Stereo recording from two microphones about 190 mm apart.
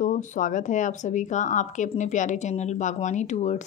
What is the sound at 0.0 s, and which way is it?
Speech, 45° left (ahead or behind).